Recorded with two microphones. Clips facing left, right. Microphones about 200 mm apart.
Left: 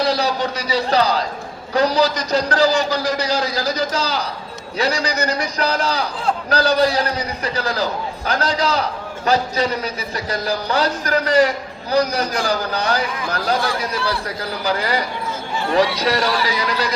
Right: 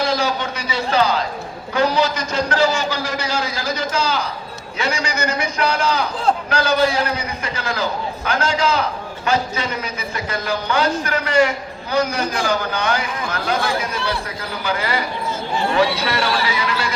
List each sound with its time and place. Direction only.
0.0 s a man's voice: 35° left (ahead or behind)